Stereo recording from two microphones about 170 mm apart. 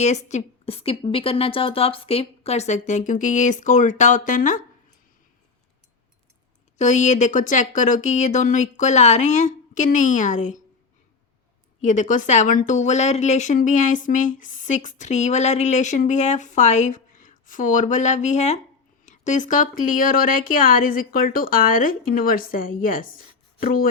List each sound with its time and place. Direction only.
0.0 s speech: 40° left (ahead or behind)
6.7 s speech: 45° left (ahead or behind)
11.8 s speech: 45° left (ahead or behind)